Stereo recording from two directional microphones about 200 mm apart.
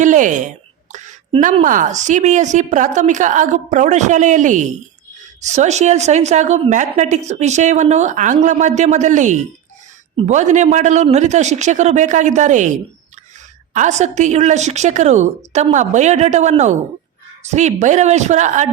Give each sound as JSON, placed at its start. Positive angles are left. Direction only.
{"t": 0.0, "sound": "a woman's voice", "side_deg": -40}